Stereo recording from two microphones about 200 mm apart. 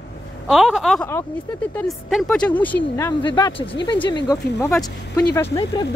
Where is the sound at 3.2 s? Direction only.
25° left (ahead or behind).